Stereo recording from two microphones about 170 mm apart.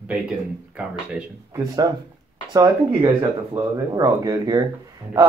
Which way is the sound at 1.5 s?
20° right (ahead or behind).